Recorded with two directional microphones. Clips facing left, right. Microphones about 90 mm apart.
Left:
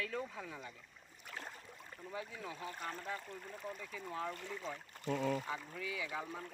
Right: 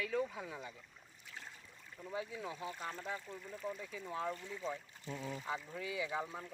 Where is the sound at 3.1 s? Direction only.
55° left (ahead or behind).